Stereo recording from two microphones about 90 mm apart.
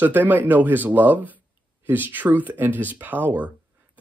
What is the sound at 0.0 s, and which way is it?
Speech, 20° right (ahead or behind).